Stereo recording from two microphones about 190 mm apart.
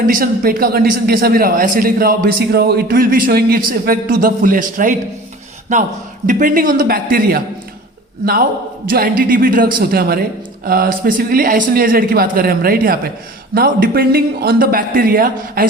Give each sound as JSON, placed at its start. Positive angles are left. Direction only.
{"t": 0.0, "sound": "a man's voice", "side_deg": -45}